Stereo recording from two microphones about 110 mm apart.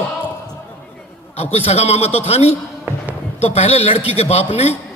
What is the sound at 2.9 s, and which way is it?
Basketball bounce, 20° right (ahead or behind).